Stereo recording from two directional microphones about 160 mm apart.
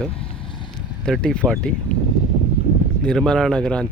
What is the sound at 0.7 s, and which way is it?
Speech, 5° left (ahead or behind).